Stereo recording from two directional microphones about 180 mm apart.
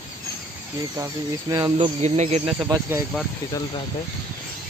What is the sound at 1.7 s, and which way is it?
Speech, 40° right (ahead or behind).